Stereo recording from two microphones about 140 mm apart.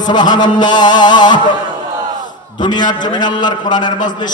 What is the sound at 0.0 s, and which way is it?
A man's voice, 30° left (ahead or behind).